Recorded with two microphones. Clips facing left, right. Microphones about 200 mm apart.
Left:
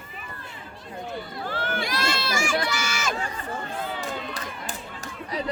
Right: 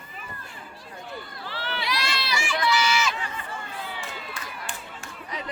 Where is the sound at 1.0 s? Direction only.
50° left (ahead or behind).